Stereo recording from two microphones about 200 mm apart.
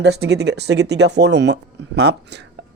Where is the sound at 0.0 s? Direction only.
55° right (ahead or behind).